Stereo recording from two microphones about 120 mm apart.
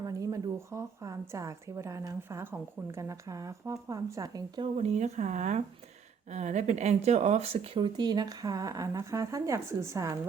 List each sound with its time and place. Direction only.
0.0 s a woman's voice: 30° right (ahead or behind)
4.8 s speech: 65° right (ahead or behind); by 5.6 s 90° right
6.3 s speech: 75° right (ahead or behind); by 7.9 s 50° right (ahead or behind)
7.9 s a woman's voice: 35° right (ahead or behind)